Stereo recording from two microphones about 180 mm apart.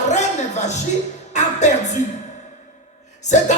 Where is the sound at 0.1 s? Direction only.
40° left (ahead or behind).